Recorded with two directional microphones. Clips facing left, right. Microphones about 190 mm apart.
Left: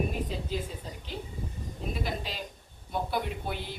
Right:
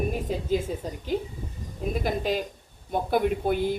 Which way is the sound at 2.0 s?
50° right (ahead or behind).